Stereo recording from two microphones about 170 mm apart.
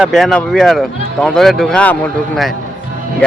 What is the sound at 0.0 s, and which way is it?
Speech, centre (ahead or behind).